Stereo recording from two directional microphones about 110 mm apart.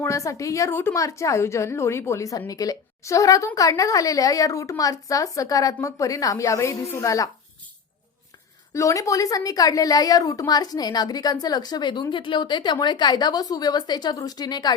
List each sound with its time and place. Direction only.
0.0 s a woman's voice: 30° left (ahead or behind)
8.7 s a woman's voice: 30° left (ahead or behind)